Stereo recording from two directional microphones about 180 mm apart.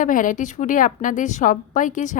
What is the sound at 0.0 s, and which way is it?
A woman's voice, 45° left (ahead or behind).